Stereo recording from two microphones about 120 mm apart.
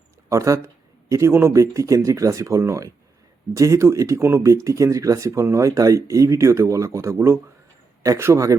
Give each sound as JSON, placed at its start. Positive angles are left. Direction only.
{"t": 0.3, "sound": "speech", "side_deg": -25}